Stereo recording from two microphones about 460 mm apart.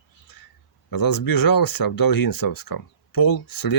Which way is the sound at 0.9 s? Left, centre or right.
Left.